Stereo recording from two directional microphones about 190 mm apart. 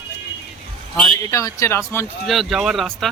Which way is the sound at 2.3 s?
Centre (ahead or behind).